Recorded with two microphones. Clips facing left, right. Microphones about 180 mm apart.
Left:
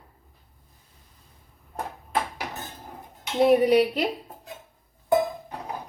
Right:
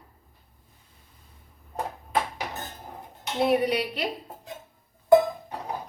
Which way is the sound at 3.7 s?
45° left (ahead or behind).